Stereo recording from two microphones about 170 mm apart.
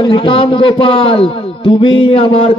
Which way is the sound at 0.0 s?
30° left (ahead or behind).